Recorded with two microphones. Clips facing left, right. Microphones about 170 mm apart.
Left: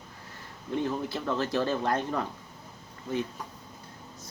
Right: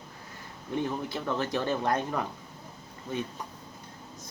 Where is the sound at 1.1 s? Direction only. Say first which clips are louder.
Left 1 dB; 15° right (ahead or behind).